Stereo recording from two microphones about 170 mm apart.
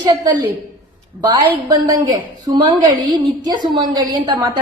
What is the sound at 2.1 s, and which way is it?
A woman's voice, 20° right (ahead or behind).